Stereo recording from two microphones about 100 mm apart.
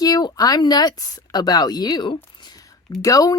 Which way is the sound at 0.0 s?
40° left (ahead or behind).